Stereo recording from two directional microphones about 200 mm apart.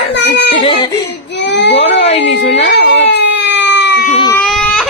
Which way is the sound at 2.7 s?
60° left (ahead or behind).